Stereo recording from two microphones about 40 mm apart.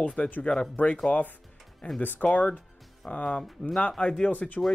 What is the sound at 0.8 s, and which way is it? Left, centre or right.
Speech, left.